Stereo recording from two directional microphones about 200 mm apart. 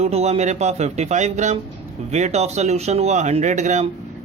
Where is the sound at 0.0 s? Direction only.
30° right (ahead or behind).